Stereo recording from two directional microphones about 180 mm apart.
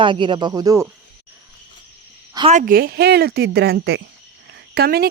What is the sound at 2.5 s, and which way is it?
Speech, 50° right (ahead or behind).